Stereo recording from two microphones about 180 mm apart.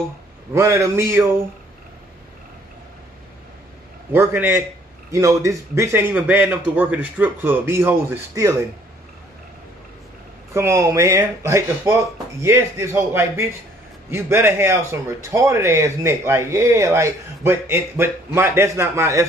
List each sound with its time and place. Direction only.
0.6 s a man's voice: 15° right (ahead or behind)
4.1 s a man's voice: 10° right (ahead or behind)
10.5 s a man's voice: 15° right (ahead or behind)